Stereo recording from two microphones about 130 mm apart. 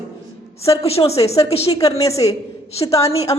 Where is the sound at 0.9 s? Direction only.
50° left (ahead or behind).